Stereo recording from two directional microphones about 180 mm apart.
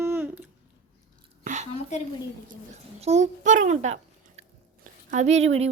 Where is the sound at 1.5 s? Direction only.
40° right (ahead or behind).